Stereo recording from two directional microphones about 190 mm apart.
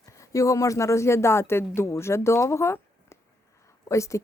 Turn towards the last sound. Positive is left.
turn(degrees=15)  # may be behind; listen again after turning